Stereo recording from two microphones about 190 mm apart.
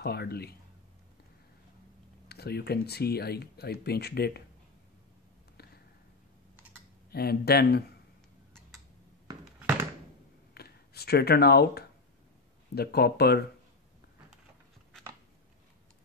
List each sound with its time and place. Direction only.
0.0 s speech: 55° left (ahead or behind)
2.2 s speech: 55° left (ahead or behind)
7.1 s speech: 55° left (ahead or behind)
9.4 s a sound: 5° right (ahead or behind)
10.5 s a sound: 55° left (ahead or behind)
12.7 s speech: 55° left (ahead or behind)